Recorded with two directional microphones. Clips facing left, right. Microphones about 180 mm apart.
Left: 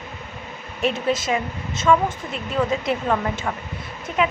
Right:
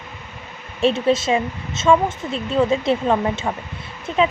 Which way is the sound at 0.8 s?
25° right (ahead or behind).